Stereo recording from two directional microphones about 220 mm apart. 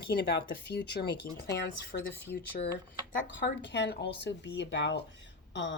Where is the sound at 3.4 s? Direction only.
55° left (ahead or behind).